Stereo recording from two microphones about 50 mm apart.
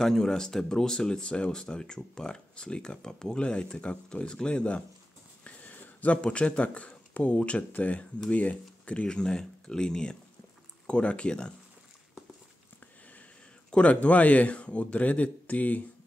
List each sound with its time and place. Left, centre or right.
0.0 s speech: centre
5.4 s a sound: left
6.2 s speech: left
13.7 s speech: left